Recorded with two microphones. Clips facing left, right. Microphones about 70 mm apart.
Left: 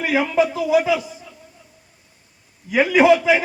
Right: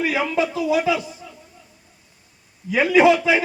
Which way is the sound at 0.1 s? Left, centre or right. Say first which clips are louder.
Left 3 dB; centre.